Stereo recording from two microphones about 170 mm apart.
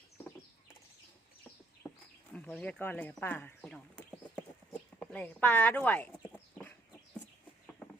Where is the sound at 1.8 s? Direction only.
15° left (ahead or behind).